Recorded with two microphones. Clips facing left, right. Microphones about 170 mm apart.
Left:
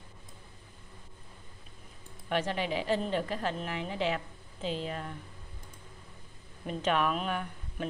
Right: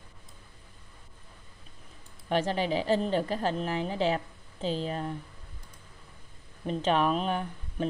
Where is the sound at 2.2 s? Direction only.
35° right (ahead or behind).